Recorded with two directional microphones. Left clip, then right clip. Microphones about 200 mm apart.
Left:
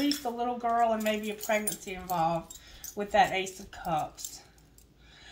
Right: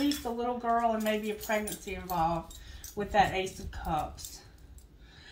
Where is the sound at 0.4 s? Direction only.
40° left (ahead or behind).